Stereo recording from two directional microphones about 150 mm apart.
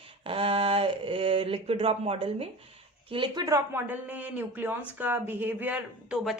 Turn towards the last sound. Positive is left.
turn(degrees=-5)  # may be behind; listen again after turning